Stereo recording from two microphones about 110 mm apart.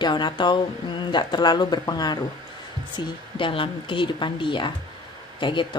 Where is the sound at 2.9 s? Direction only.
50° left (ahead or behind).